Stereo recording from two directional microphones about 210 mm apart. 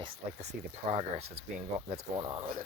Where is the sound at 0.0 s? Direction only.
30° right (ahead or behind).